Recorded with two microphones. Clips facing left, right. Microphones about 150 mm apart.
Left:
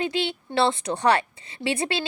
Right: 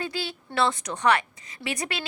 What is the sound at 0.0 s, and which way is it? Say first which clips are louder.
A woman's voice: left 6 dB; 25° left (ahead or behind).